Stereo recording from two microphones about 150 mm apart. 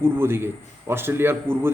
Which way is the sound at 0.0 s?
15° right (ahead or behind).